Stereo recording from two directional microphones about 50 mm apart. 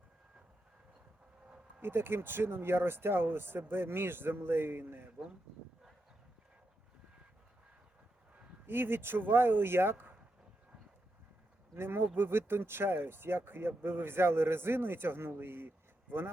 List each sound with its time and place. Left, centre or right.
1.8 s speech: right
8.6 s speech: right
11.7 s speech: right